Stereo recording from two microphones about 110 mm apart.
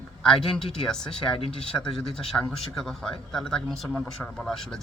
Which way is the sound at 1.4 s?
60° left (ahead or behind).